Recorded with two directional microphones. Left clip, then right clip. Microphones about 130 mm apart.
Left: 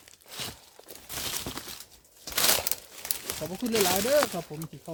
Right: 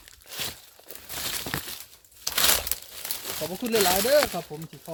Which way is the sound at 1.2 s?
5° right (ahead or behind).